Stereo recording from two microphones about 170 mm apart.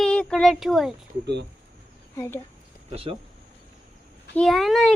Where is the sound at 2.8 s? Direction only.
35° right (ahead or behind).